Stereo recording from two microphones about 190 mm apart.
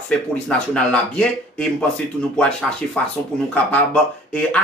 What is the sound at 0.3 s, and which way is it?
Speech, 5° left (ahead or behind).